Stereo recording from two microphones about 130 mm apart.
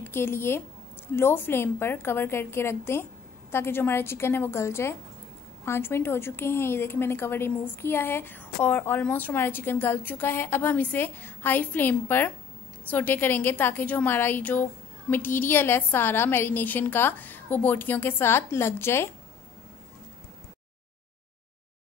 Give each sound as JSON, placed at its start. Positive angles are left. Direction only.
{"t": 0.0, "sound": "a woman's voice", "side_deg": 20}